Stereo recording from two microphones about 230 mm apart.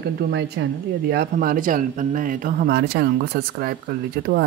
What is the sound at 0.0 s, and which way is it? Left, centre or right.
Speech, right.